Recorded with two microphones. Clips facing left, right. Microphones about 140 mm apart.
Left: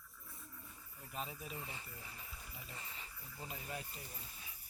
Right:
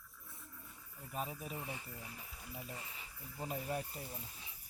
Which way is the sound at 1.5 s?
15° right (ahead or behind).